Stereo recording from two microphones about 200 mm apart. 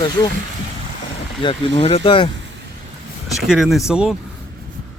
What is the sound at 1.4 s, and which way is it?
Speech, 25° left (ahead or behind).